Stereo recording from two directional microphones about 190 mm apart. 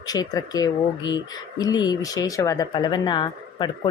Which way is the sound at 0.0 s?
20° left (ahead or behind).